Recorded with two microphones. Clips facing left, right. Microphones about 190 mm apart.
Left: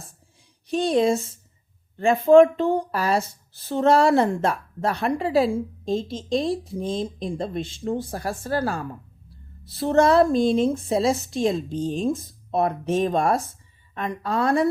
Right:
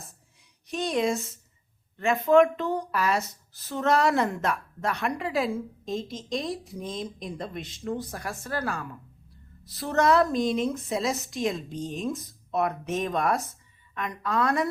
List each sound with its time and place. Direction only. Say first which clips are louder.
0.7 s a woman's voice: left 6 dB; 30° left (ahead or behind)